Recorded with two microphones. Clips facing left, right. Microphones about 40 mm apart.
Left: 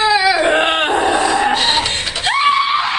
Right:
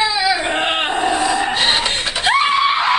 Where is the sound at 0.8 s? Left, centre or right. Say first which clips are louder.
Left 3 dB; left.